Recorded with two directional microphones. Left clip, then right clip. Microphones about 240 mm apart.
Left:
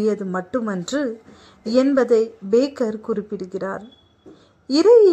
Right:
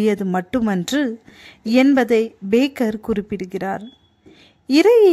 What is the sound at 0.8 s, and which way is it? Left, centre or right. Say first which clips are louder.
A woman's voice: right 2 dB; right.